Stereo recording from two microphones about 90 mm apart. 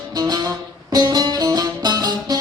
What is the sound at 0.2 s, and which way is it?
Music, 45° right (ahead or behind).